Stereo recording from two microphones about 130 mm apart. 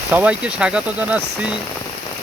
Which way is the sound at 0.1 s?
10° right (ahead or behind).